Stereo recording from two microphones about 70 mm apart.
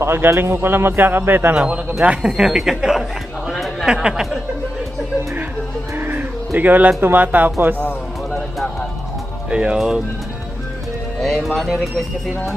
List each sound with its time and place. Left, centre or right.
0.0 s speech: right
1.5 s speech: centre
5.9 s bird: right
7.0 s speech: right
9.5 s speech: centre
11.2 s speech: centre